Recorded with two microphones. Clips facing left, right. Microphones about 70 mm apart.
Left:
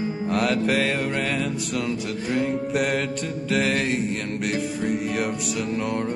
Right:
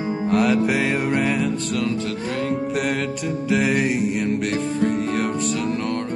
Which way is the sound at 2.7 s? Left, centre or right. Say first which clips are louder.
Even; centre.